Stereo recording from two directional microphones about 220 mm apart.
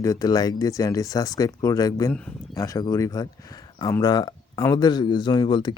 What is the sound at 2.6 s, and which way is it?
Speech, 15° left (ahead or behind).